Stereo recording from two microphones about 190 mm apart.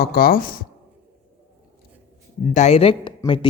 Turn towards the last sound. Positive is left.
turn(degrees=25)  # may be behind; listen again after turning